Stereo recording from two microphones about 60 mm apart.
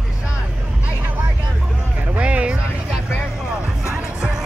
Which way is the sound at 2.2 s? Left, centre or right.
Centre.